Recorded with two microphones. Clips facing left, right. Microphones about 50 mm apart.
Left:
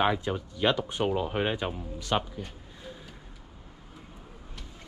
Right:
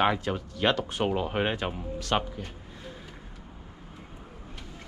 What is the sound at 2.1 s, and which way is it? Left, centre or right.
Speech, right.